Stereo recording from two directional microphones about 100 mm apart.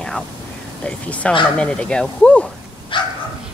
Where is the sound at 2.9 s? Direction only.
55° left (ahead or behind).